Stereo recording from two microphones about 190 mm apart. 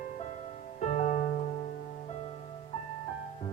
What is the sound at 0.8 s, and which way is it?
Music, 40° left (ahead or behind).